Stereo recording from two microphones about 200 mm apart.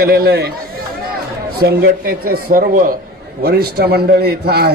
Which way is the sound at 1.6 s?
50° right (ahead or behind).